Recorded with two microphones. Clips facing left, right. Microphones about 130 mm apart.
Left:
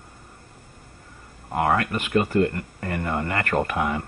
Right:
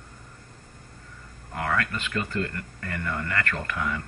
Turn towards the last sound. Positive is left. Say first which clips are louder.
# left 7 dB
turn(degrees=25)  # may be behind; listen again after turning